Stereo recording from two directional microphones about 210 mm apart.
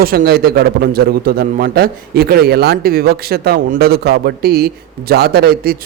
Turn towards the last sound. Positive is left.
turn(degrees=-45)  # may be behind; listen again after turning